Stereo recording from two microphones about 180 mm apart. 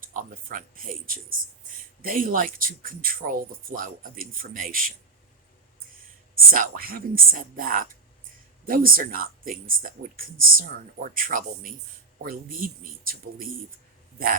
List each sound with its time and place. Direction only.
0.0 s speech: 45° right (ahead or behind)
6.5 s speech: 55° right (ahead or behind)